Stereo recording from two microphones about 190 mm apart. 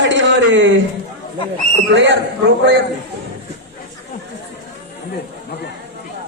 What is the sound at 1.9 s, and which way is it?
Speech, 70° right (ahead or behind).